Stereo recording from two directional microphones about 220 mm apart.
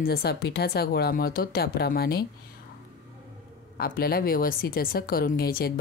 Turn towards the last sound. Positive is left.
turn(degrees=45)  # may be behind; listen again after turning